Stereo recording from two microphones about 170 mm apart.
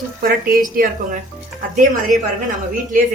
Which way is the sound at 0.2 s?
60° right (ahead or behind).